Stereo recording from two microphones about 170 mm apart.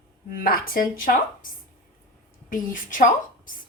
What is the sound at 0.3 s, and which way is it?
Speech, 55° left (ahead or behind).